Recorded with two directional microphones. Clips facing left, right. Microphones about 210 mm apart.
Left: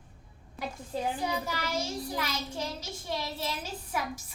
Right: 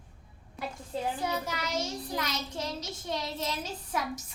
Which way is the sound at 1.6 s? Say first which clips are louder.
Even; 10° left (ahead or behind).